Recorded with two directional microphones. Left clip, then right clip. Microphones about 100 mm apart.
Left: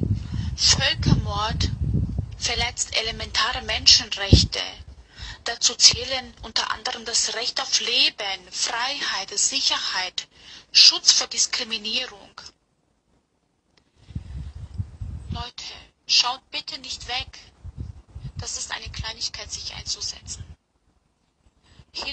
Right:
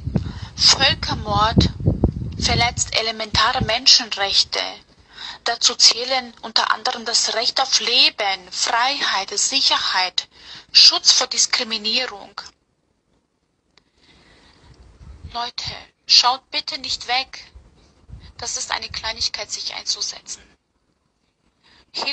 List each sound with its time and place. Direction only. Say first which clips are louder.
0.2 s speech: right 6 dB; 40° right (ahead or behind)
15.2 s a woman's voice: right 8 dB; 45° right (ahead or behind)